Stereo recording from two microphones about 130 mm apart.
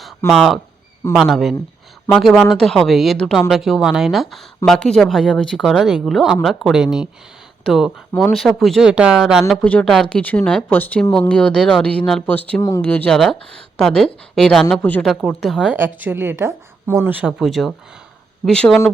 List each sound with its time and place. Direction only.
0.3 s speech: centre (ahead or behind)
9.6 s speech: 10° left (ahead or behind)
15.0 s speech: centre (ahead or behind)
15.7 s a woman's voice: 15° right (ahead or behind)
17.4 s speech: centre (ahead or behind)